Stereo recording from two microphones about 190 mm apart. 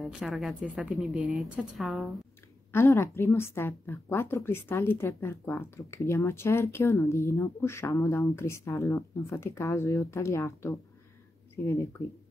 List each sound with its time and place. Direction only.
0.0 s a woman's voice: centre (ahead or behind)
2.7 s a woman's voice: 10° left (ahead or behind)